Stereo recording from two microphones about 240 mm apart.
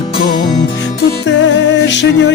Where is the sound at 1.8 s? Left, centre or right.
Left.